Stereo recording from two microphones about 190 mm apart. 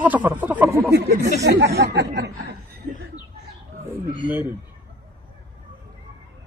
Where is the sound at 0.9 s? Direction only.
60° right (ahead or behind).